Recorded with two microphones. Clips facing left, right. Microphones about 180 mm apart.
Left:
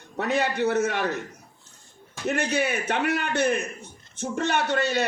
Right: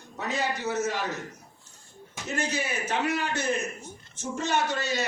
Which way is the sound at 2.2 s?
60° left (ahead or behind).